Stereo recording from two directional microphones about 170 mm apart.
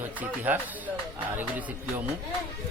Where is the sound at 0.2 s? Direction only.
10° right (ahead or behind).